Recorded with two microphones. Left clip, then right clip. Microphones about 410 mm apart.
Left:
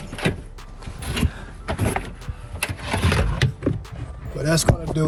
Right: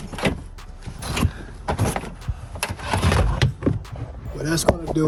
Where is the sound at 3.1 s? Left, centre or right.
Centre.